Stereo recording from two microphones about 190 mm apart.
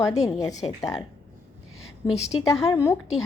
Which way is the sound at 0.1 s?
15° left (ahead or behind).